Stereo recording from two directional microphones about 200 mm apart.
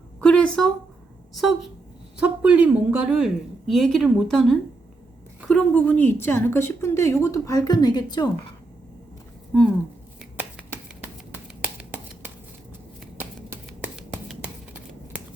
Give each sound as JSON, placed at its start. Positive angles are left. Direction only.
{"t": 0.2, "sound": "a woman's voice", "side_deg": 5}
{"t": 10.2, "sound": "finger snapping", "side_deg": -5}
{"t": 13.1, "sound": "a sound", "side_deg": -10}